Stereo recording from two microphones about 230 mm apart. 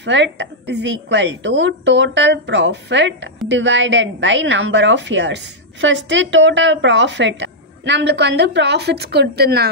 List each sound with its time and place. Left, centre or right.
0.0 s a woman's voice: right